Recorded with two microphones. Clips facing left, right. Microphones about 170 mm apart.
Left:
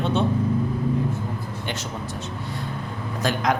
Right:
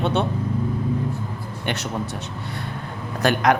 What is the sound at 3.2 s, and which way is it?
Speech, 65° right (ahead or behind).